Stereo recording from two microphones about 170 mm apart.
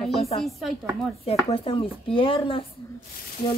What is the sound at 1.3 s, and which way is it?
Speech, 35° left (ahead or behind).